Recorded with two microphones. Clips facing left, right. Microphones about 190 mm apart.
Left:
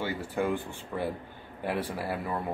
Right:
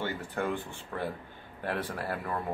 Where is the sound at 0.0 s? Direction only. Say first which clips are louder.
Left 3 dB; 10° left (ahead or behind).